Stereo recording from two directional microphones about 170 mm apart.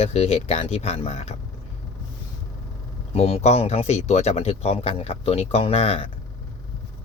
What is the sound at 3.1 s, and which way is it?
Speech, 40° left (ahead or behind).